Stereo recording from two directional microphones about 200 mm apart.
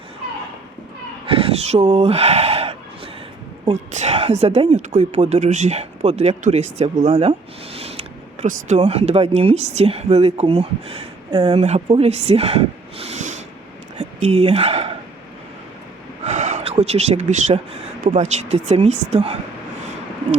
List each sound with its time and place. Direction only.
1.3 s a woman's voice: 30° right (ahead or behind)
16.2 s gasp: 35° right (ahead or behind)
18.0 s a woman's voice: 40° right (ahead or behind)